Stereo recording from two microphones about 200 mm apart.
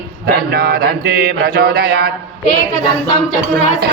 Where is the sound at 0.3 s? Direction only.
50° right (ahead or behind).